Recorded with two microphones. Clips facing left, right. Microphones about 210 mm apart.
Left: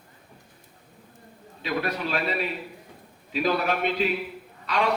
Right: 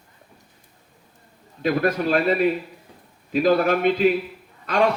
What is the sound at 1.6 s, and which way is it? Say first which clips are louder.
A man's voice: right 7 dB; 50° right (ahead or behind).